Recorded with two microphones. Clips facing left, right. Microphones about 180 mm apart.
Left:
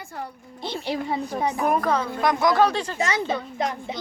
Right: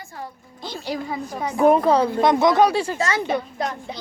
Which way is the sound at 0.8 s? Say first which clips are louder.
Left 1 dB; 25° left (ahead or behind).